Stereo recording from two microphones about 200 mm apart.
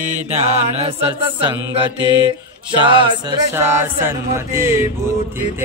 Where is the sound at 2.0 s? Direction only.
25° left (ahead or behind).